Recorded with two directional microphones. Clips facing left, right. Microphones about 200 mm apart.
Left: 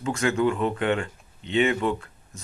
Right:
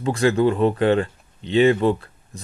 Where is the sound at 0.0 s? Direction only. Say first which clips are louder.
Right 5 dB; 35° right (ahead or behind).